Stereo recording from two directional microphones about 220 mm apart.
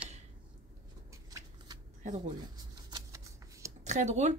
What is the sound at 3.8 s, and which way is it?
Speech, 35° right (ahead or behind).